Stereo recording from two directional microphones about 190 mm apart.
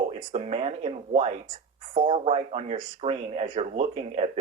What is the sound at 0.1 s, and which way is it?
Speech, 35° right (ahead or behind).